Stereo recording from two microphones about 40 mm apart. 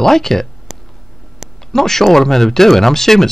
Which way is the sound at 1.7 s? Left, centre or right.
Centre.